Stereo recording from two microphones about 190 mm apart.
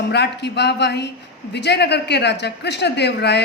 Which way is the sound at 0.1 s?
60° left (ahead or behind).